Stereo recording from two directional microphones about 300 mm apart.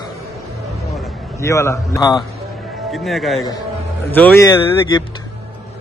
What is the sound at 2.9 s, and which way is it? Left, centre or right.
A man's voice, centre.